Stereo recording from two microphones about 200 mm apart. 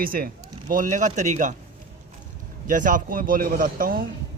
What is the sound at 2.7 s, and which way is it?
Speech, 40° right (ahead or behind).